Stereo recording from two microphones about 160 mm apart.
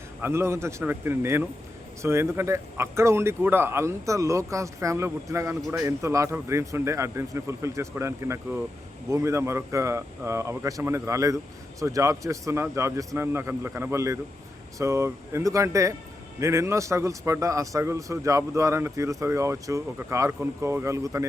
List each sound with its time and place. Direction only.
0.2 s a man's voice: 15° right (ahead or behind)